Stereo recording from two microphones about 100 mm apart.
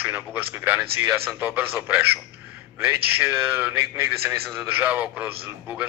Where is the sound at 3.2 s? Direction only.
15° right (ahead or behind).